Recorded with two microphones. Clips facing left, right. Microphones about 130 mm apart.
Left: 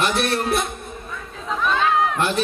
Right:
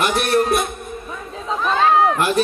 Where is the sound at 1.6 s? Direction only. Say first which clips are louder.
Right 4 dB; 35° right (ahead or behind).